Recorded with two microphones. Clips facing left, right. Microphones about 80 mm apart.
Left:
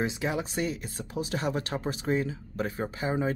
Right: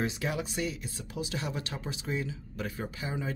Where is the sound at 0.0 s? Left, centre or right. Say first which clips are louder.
Left 3 dB; left.